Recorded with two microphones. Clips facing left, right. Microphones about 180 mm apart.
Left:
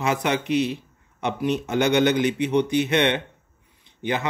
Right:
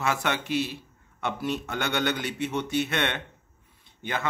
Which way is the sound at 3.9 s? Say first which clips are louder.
Left 6 dB; 20° left (ahead or behind).